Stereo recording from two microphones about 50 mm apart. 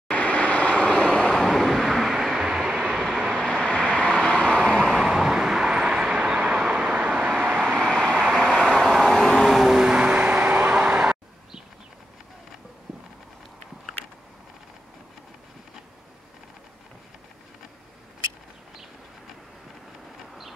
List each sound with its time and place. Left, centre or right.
0.1 s vehicle: left; by 2.1 s centre
2.1 s vehicle: centre
4.0 s vehicle: centre
4.5 s vehicle: centre
4.7 s vehicle: centre; by 7.1 s right
7.1 s vehicle: centre
7.9 s vehicle: centre
8.2 s vehicle: centre; by 10.8 s right
10.8 s vehicle: centre